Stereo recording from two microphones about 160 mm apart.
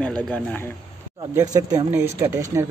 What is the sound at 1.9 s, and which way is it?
Speech, 15° right (ahead or behind).